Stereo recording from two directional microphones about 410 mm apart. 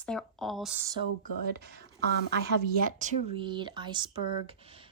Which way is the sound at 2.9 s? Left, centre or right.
Centre.